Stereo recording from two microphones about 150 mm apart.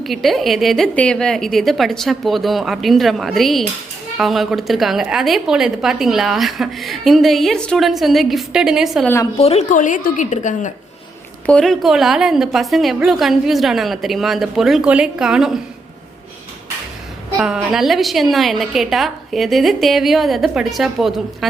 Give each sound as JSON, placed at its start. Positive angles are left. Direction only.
{"t": 0.0, "sound": "a woman's voice", "side_deg": 0}
{"t": 9.4, "sound": "a woman's voice", "side_deg": 45}
{"t": 11.4, "sound": "a woman's voice", "side_deg": 5}
{"t": 17.3, "sound": "a woman's voice", "side_deg": -5}